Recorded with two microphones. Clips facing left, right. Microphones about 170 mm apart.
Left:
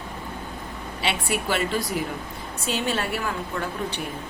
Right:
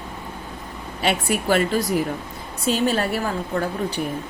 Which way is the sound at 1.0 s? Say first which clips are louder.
Right 5 dB; 45° right (ahead or behind).